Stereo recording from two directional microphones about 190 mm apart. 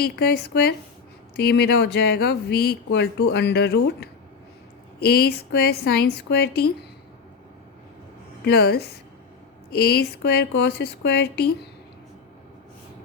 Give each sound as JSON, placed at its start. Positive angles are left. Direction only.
{"t": 0.0, "sound": "speech", "side_deg": 55}
{"t": 8.4, "sound": "speech", "side_deg": 55}